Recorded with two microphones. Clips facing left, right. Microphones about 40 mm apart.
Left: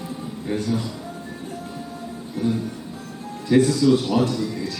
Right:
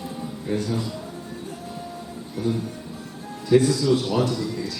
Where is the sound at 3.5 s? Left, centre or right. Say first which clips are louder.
Left 2 dB; left.